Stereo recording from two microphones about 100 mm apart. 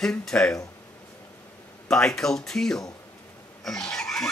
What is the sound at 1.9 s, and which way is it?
Speech, 5° left (ahead or behind).